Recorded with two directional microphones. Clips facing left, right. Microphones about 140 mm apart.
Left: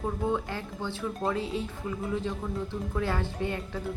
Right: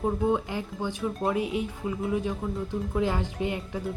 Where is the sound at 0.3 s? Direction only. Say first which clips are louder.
Right 3 dB; 15° right (ahead or behind).